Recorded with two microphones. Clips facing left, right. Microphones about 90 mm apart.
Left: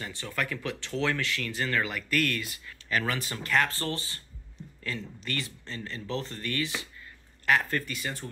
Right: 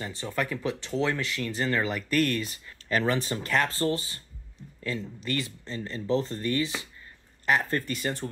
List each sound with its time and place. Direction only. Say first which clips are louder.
0.0 s speech: right 3 dB; 25° right (ahead or behind)
7.8 s speech: right 5 dB; 35° right (ahead or behind)